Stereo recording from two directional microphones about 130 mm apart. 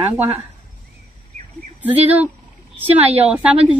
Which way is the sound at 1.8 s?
10° right (ahead or behind).